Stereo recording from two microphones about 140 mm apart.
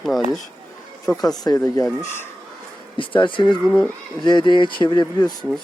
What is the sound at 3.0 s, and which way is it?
Speech, 35° left (ahead or behind).